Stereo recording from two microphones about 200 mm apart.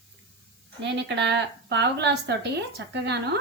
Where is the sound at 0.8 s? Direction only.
60° right (ahead or behind).